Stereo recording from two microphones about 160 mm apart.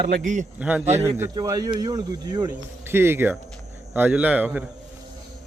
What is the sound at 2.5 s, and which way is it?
Speech, 15° right (ahead or behind).